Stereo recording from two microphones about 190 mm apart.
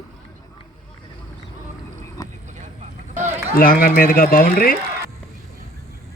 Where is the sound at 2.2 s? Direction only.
20° left (ahead or behind).